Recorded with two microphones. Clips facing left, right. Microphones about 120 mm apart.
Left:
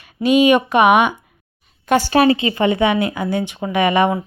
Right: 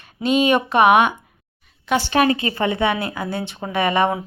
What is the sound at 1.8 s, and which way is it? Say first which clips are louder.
Speech: left 4 dB; 45° left (ahead or behind).